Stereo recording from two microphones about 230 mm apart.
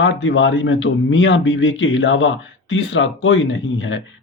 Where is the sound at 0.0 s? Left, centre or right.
Left.